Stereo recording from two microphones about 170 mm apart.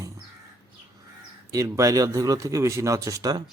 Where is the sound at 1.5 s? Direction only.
20° right (ahead or behind).